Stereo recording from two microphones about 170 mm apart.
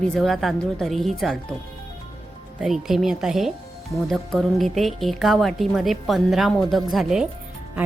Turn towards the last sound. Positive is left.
turn(degrees=0)  # may be behind; listen again after turning